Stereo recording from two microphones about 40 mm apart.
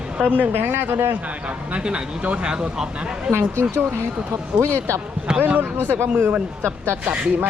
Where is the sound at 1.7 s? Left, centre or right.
Right.